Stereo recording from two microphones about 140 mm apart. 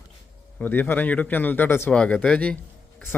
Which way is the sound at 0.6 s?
15° left (ahead or behind).